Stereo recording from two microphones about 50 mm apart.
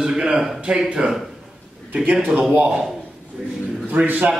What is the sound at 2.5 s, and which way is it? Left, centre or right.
Speech, right.